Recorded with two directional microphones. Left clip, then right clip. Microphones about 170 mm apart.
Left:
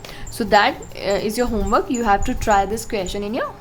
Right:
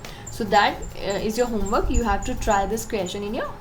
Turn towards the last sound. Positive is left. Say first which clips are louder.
# left 3 dB
turn(degrees=30)  # may be behind; listen again after turning